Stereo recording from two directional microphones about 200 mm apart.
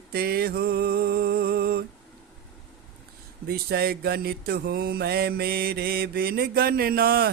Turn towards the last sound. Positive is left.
turn(degrees=-50)  # may be behind; listen again after turning